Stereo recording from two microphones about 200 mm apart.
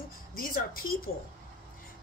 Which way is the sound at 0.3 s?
45° left (ahead or behind).